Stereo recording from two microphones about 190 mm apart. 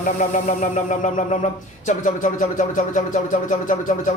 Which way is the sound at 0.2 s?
40° left (ahead or behind).